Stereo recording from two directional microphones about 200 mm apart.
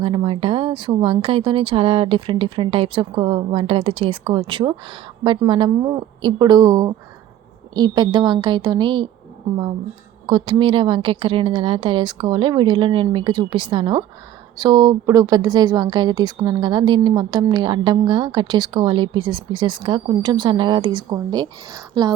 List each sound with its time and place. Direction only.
0.0 s speech: 25° right (ahead or behind)
10.2 s speech: 20° right (ahead or behind)